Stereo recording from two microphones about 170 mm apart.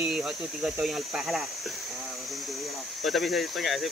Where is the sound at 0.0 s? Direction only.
5° right (ahead or behind).